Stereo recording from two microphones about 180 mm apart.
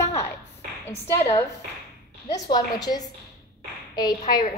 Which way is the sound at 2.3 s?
20° left (ahead or behind).